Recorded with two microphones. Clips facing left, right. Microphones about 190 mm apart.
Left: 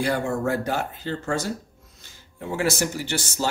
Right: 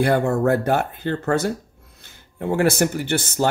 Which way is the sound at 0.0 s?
60° right (ahead or behind).